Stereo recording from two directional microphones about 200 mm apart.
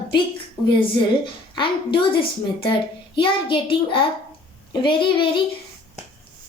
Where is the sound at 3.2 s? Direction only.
25° left (ahead or behind).